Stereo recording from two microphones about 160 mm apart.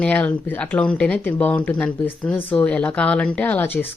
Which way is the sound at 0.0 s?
10° left (ahead or behind).